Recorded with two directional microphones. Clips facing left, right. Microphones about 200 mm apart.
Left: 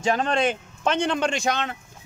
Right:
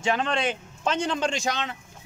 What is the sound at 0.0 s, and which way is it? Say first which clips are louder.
A man's voice: left 3 dB; 40° left (ahead or behind).